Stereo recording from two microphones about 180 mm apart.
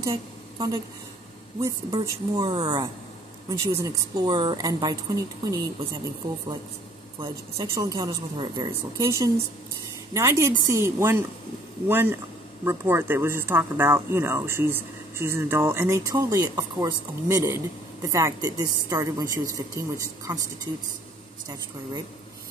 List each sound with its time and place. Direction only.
0.0 s a sound: 20° right (ahead or behind)
1.6 s a woman's voice: 20° right (ahead or behind)
7.7 s a woman's voice: 20° right (ahead or behind)